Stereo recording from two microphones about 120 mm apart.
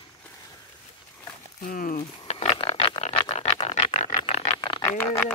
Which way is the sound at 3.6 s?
65° left (ahead or behind).